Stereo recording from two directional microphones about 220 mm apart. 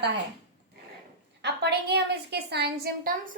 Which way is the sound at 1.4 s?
50° right (ahead or behind).